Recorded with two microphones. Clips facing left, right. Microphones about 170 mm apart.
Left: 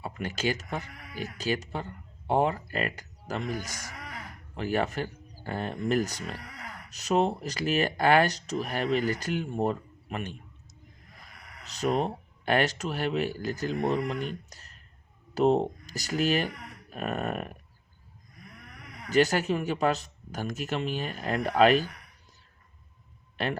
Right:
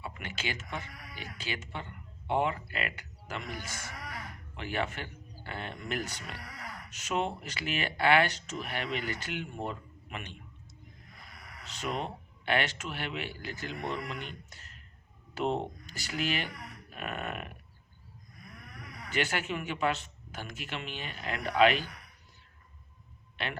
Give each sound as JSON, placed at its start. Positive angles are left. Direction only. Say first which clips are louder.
{"t": 0.0, "sound": "speech", "louder": "left 8 dB", "side_deg": 40}
{"t": 11.6, "sound": "speech", "louder": "left 8 dB", "side_deg": 40}
{"t": 19.0, "sound": "speech", "louder": "left 9 dB", "side_deg": 40}
{"t": 23.4, "sound": "speech", "louder": "left 7 dB", "side_deg": 40}